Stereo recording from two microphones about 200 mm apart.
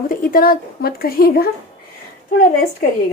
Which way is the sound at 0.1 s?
45° left (ahead or behind).